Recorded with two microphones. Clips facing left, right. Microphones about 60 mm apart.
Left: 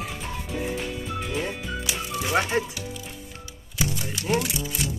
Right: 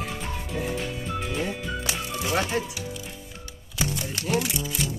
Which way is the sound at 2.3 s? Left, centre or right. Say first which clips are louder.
Left 2 dB; left.